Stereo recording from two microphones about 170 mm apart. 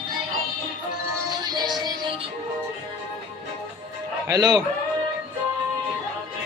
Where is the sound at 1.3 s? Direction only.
25° right (ahead or behind).